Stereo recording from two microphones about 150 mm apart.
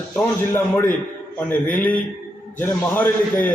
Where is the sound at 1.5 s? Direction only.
10° left (ahead or behind).